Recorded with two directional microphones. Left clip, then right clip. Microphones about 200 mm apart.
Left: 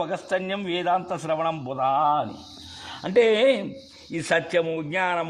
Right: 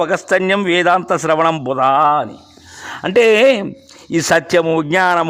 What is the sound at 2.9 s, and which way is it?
A man's voice, 25° right (ahead or behind).